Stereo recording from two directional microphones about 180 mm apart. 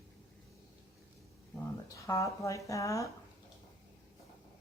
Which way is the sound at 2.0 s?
15° left (ahead or behind).